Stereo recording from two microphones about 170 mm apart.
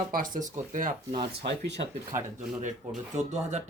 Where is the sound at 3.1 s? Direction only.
40° right (ahead or behind).